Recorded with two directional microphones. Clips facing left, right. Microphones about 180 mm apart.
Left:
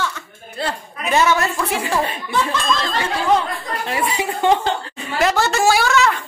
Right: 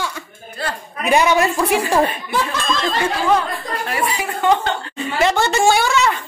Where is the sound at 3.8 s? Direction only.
25° left (ahead or behind).